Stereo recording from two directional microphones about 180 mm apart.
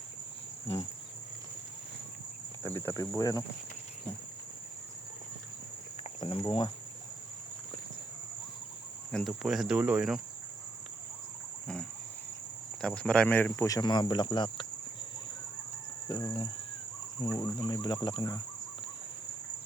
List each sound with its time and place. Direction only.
2.6 s speech: 15° left (ahead or behind)
6.0 s cricket: 30° left (ahead or behind)
9.1 s speech: centre (ahead or behind)
12.8 s speech: 5° left (ahead or behind); by 14.7 s 25° left (ahead or behind)
16.0 s speech: 20° left (ahead or behind)